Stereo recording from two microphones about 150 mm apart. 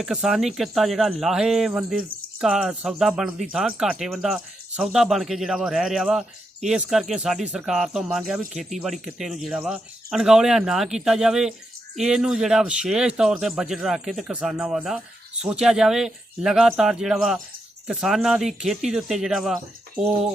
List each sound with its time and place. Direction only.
0.0 s speech: 5° right (ahead or behind)